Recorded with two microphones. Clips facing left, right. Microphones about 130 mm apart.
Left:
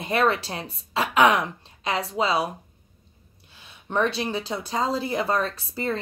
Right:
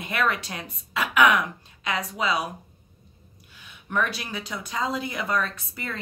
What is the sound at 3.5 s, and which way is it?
A woman's voice, 30° left (ahead or behind).